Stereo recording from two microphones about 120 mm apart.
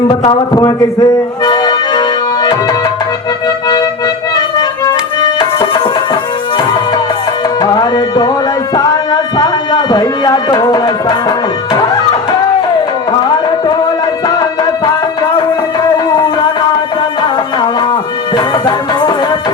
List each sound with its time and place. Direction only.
0.3 s speech: 35° left (ahead or behind)
1.5 s music: 35° left (ahead or behind)
4.4 s music: 40° left (ahead or behind)
7.6 s music: 35° left (ahead or behind)
9.4 s music: 35° left (ahead or behind)
18.3 s music: 40° left (ahead or behind)